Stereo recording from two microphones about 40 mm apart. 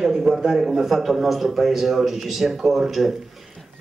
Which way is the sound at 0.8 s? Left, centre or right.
Centre.